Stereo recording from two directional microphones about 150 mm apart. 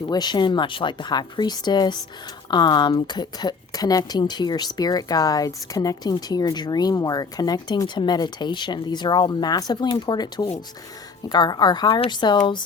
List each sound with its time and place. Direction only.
0.1 s speech: 30° left (ahead or behind)